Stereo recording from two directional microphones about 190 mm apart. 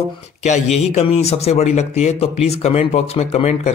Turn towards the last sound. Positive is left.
turn(degrees=35)  # may be behind; listen again after turning